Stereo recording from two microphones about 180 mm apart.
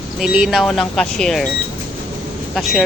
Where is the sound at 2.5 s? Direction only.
Centre (ahead or behind).